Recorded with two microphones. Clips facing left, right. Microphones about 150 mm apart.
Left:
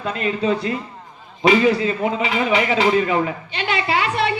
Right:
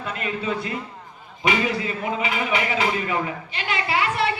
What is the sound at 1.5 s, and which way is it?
A man's voice, 30° left (ahead or behind).